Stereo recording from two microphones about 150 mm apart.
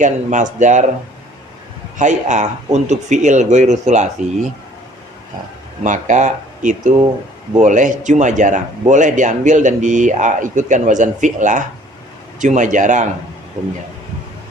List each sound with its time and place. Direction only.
0.0 s speech: 55° right (ahead or behind)
2.0 s speech: 55° right (ahead or behind)
5.8 s speech: 55° right (ahead or behind)